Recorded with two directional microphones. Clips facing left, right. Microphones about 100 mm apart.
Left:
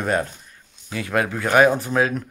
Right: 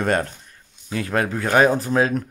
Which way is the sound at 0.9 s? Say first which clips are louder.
Even; 35° right (ahead or behind).